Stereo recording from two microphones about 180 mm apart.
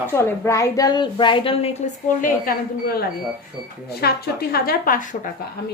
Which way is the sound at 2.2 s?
50° left (ahead or behind).